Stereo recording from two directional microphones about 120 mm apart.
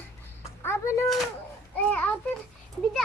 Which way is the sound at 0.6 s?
20° left (ahead or behind).